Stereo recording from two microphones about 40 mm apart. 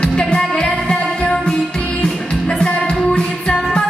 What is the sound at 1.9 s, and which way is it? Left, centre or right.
Music, centre.